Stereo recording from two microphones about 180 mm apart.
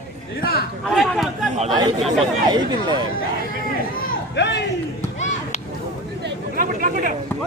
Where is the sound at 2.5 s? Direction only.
25° right (ahead or behind).